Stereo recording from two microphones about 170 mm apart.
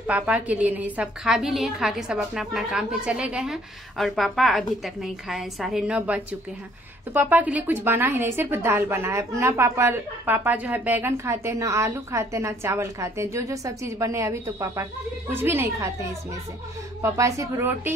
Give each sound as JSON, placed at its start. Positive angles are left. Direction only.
{"t": 0.0, "sound": "a woman's voice", "side_deg": -10}